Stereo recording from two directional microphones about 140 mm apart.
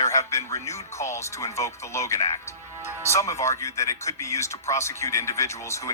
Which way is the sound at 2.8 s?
20° right (ahead or behind).